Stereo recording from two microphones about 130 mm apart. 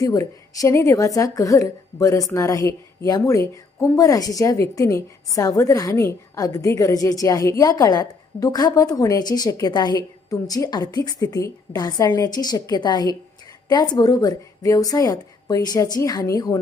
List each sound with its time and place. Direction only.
0.0 s a woman's voice: 25° left (ahead or behind)